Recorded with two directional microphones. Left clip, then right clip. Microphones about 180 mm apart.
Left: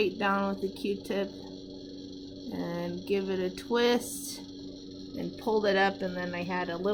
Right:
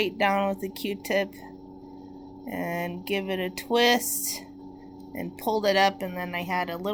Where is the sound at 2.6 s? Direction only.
20° right (ahead or behind).